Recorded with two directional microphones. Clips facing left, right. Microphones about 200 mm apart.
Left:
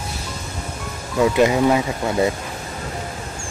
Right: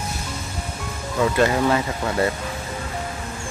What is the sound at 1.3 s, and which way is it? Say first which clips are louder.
Speech: left 3 dB; 10° left (ahead or behind).